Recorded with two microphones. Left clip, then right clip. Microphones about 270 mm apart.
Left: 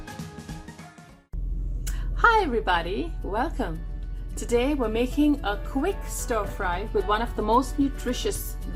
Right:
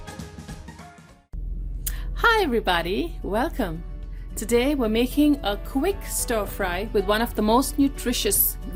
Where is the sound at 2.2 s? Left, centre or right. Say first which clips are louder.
Even; right.